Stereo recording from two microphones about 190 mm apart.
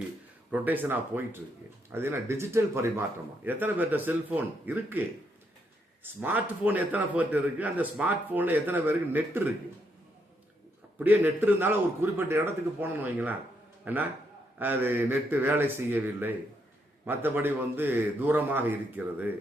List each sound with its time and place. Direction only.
0.5 s a man's voice: 10° right (ahead or behind)
11.0 s a man's voice: 10° right (ahead or behind)